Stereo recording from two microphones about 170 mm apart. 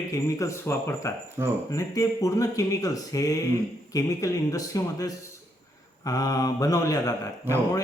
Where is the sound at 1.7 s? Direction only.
20° left (ahead or behind).